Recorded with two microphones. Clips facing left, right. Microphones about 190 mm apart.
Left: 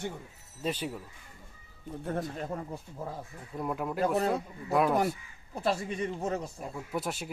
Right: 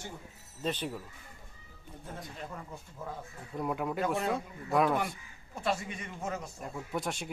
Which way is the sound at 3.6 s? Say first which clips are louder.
Left 2 dB; centre (ahead or behind).